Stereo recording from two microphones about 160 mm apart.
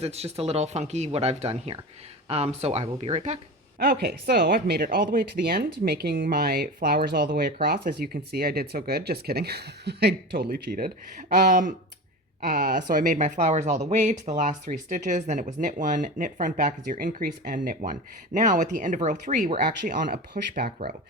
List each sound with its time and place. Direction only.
0.0 s speech: 40° right (ahead or behind)
3.8 s speech: 85° right
11.3 s speech: 55° right (ahead or behind)
12.4 s speech: 70° right (ahead or behind)